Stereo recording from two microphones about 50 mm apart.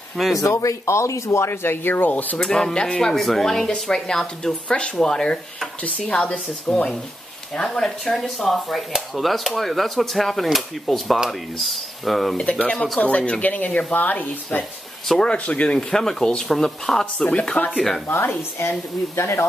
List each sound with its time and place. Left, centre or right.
0.4 s speech: left
2.4 s speech: centre
5.8 s speech: left
7.6 s speech: centre
12.4 s speech: left
15.9 s speech: centre
17.0 s speech: left
18.0 s a woman's voice: left
18.7 s speech: left